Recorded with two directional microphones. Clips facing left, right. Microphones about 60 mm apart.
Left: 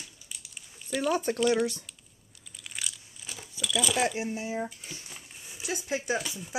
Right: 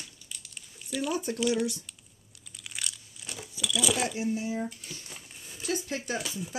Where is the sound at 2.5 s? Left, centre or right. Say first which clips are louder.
Even; centre.